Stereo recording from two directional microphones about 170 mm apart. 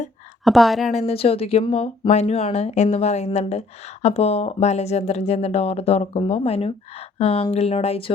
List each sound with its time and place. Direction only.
0.4 s a woman's voice: centre (ahead or behind)
0.9 s speech: 35° left (ahead or behind)